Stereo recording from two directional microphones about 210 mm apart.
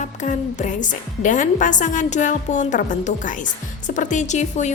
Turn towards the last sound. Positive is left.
turn(degrees=35)  # may be behind; listen again after turning